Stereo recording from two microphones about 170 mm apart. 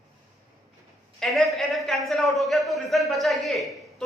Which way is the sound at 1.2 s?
Centre (ahead or behind).